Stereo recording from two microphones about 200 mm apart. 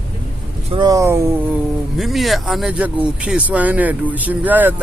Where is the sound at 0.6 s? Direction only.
20° right (ahead or behind).